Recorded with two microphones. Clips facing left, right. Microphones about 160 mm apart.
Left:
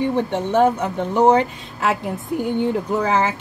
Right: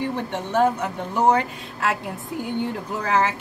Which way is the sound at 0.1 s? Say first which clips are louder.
Left 6 dB; 25° left (ahead or behind).